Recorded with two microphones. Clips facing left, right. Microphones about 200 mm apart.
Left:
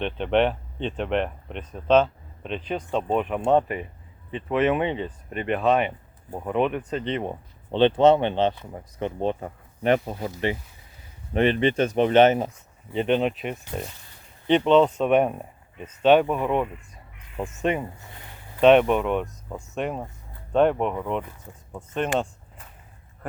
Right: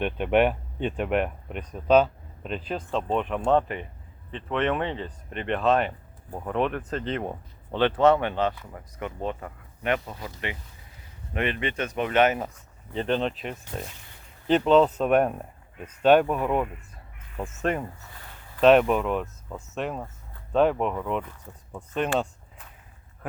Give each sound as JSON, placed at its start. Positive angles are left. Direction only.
{"t": 0.0, "sound": "speech", "side_deg": -10}
{"t": 7.7, "sound": "speech", "side_deg": 25}
{"t": 12.9, "sound": "speech", "side_deg": 5}